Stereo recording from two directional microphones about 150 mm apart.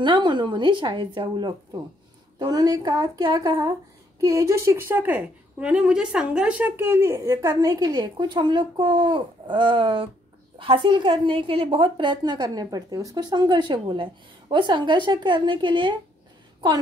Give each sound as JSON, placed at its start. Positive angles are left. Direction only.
{"t": 0.0, "sound": "a woman's voice", "side_deg": -30}